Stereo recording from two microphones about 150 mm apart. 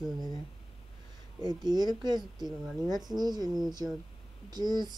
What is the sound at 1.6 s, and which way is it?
Speech, 25° right (ahead or behind).